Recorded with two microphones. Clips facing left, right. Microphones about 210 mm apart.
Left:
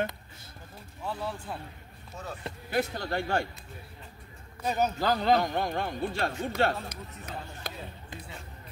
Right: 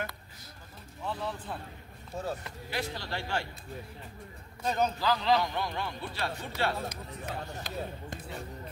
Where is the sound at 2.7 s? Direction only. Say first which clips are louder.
Left 6 dB; 50° left (ahead or behind).